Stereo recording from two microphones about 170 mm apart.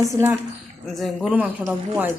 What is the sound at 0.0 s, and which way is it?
Speech, 15° right (ahead or behind).